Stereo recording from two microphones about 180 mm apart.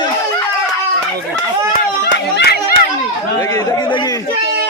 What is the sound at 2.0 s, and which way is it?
Run, 75° left (ahead or behind).